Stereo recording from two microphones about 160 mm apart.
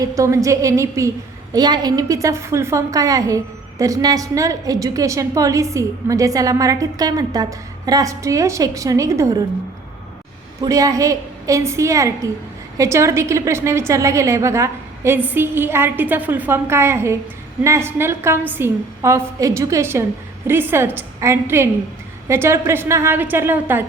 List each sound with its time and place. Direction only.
0.0 s a woman's voice: 20° right (ahead or behind)
10.6 s a woman's voice: 20° right (ahead or behind)